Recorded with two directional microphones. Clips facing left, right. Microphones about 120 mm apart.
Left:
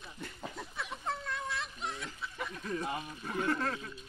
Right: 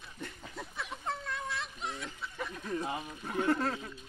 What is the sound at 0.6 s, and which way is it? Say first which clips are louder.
Chicken: right 4 dB; centre (ahead or behind).